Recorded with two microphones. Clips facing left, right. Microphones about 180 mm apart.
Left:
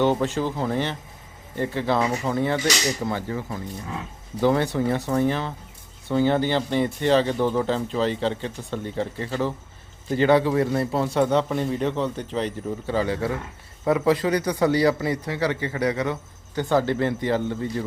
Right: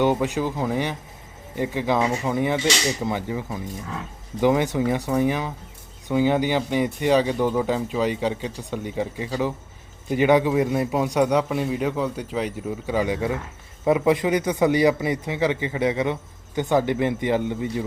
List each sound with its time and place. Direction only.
0.0 s a man's voice: 10° right (ahead or behind)